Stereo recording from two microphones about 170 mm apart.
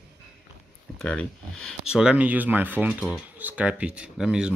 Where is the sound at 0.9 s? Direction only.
5° left (ahead or behind).